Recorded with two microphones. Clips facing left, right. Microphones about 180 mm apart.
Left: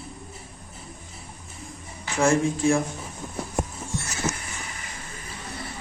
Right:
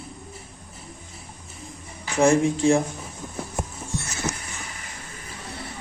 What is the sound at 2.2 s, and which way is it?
Speech, 20° right (ahead or behind).